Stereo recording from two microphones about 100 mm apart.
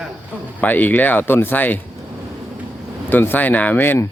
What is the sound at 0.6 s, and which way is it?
Speech, 15° left (ahead or behind).